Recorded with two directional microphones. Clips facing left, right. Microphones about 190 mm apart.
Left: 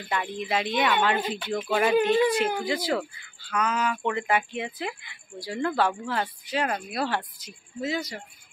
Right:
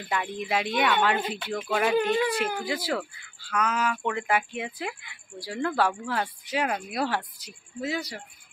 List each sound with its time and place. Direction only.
0.1 s speech: 5° right (ahead or behind)
2.0 s speech: 25° left (ahead or behind)
2.6 s speech: 10° right (ahead or behind)